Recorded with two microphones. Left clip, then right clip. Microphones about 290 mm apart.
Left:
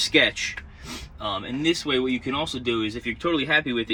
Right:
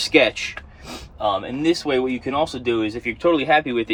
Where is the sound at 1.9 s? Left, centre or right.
Right.